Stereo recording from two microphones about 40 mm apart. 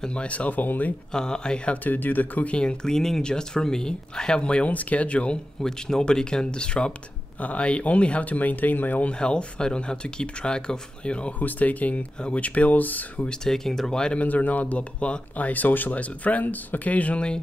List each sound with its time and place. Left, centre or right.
0.0 s speech: left
1.1 s speech: centre
1.9 s speech: left
2.4 s speech: left
4.6 s speech: left
5.6 s speech: centre
7.3 s speech: left
9.2 s speech: left
11.3 s speech: left
13.4 s speech: centre
14.1 s speech: left